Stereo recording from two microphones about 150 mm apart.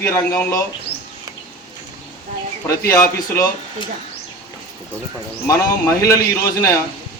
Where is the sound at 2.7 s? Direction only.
20° left (ahead or behind).